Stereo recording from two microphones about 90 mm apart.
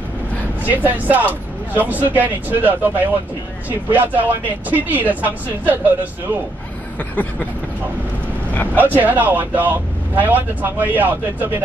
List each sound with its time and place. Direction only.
0.7 s speech: 20° right (ahead or behind)
8.7 s speech: 20° right (ahead or behind)